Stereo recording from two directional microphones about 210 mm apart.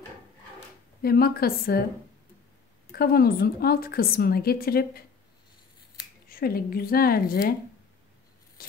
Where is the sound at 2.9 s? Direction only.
45° left (ahead or behind).